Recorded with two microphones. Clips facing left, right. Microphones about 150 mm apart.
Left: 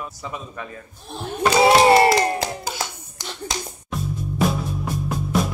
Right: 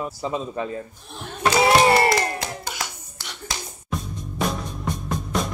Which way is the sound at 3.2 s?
15° left (ahead or behind).